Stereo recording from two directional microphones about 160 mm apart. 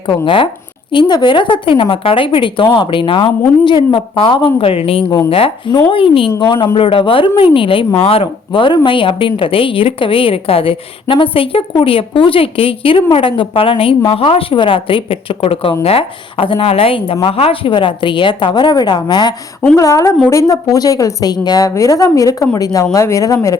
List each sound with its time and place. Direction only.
0.1 s a woman's voice: 35° left (ahead or behind)